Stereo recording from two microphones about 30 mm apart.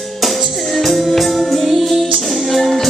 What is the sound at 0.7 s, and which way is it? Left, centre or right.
Music, centre.